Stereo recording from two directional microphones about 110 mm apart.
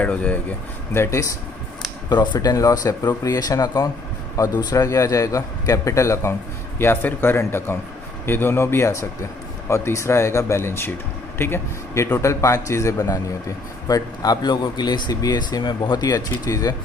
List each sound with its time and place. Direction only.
0.0 s speech: 15° left (ahead or behind)
0.9 s a man's voice: 25° left (ahead or behind)
2.0 s a man's voice: 40° left (ahead or behind)